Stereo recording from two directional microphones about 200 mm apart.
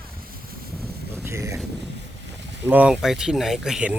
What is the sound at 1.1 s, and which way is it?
Speech, 15° right (ahead or behind).